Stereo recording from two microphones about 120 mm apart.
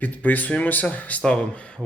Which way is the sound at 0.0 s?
15° left (ahead or behind).